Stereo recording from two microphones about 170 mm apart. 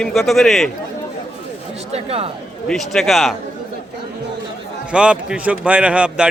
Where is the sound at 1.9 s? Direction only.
35° right (ahead or behind).